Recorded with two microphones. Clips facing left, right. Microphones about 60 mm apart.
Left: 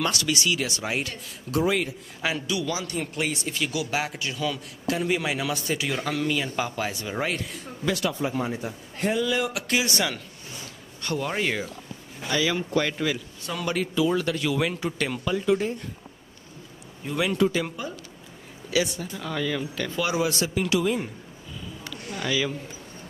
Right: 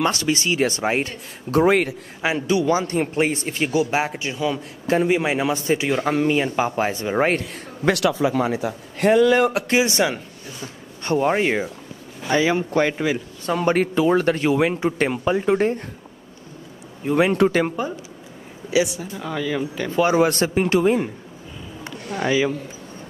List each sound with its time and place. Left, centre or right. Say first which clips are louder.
0.0 s a man's voice: right 5 dB; right
1.6 s a man's voice: right 7 dB; right
2.2 s a man's voice: right 8 dB; right
7.9 s a man's voice: right 7 dB; right
13.5 s a man's voice: right 9 dB; right
17.1 s a man's voice: right 6 dB; right
17.6 s a man's voice: right 8 dB; right
18.9 s speech: right 3 dB; centre
19.9 s a man's voice: right 9 dB; right